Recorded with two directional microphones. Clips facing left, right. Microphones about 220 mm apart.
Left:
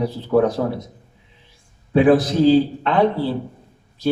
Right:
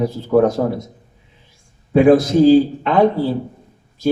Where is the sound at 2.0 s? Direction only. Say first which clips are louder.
Right 3 dB; 45° right (ahead or behind).